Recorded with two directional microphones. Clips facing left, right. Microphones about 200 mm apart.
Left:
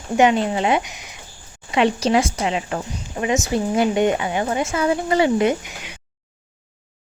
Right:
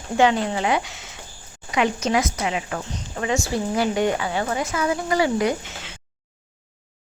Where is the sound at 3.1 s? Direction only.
20° left (ahead or behind).